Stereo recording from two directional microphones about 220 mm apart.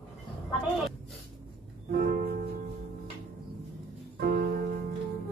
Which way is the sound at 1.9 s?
40° right (ahead or behind).